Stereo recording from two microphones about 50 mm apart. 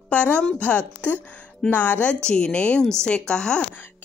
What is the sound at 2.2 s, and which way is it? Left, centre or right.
A woman's voice, centre.